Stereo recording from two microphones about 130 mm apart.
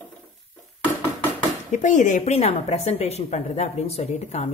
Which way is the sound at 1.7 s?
75° left (ahead or behind).